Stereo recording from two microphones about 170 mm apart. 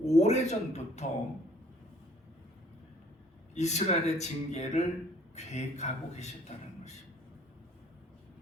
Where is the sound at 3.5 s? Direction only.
40° left (ahead or behind).